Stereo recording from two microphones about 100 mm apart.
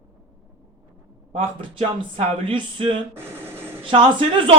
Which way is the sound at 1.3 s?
60° right (ahead or behind).